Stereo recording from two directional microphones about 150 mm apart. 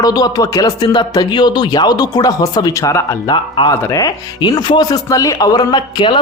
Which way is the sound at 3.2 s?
30° left (ahead or behind).